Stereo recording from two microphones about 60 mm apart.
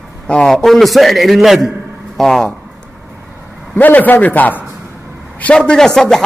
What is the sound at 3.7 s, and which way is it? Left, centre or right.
Speech, left.